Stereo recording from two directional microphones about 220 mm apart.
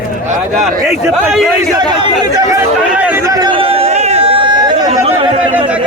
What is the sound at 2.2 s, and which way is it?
Chatter, 15° right (ahead or behind).